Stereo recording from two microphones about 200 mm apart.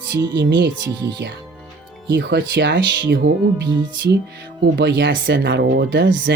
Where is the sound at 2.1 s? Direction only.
65° right (ahead or behind).